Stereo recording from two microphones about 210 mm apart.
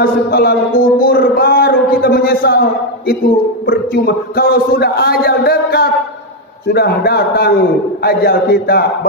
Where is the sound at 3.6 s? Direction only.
45° left (ahead or behind).